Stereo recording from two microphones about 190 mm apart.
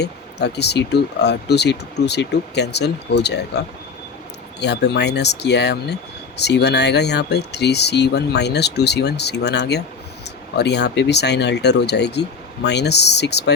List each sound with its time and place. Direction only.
0.0 s speech: 60° left (ahead or behind)
4.6 s speech: 65° left (ahead or behind)